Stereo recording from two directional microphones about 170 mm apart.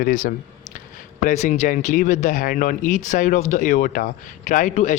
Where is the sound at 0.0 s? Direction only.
50° left (ahead or behind).